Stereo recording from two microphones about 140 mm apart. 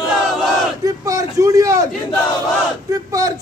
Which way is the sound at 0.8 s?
25° right (ahead or behind).